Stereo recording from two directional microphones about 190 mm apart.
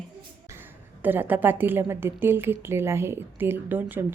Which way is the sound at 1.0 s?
10° right (ahead or behind).